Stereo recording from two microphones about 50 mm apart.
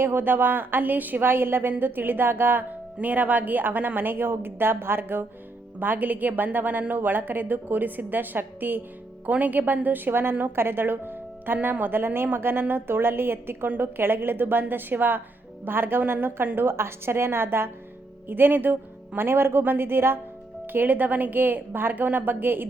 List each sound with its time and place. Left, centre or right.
0.0 s a woman's voice: right
20.7 s a woman's voice: right